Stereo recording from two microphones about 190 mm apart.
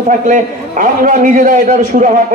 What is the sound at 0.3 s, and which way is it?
A man's voice, 45° right (ahead or behind).